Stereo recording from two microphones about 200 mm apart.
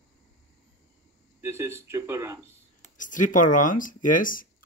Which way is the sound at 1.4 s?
15° right (ahead or behind).